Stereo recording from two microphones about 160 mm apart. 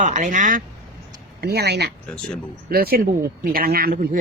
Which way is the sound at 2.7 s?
70° right (ahead or behind).